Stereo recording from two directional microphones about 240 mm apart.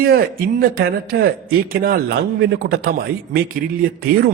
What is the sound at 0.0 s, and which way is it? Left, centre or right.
Speech, right.